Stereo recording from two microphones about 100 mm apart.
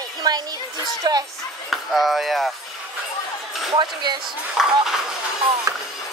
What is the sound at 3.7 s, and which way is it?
Speech, 50° right (ahead or behind).